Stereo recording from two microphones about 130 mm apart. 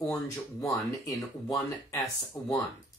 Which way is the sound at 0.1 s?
25° left (ahead or behind).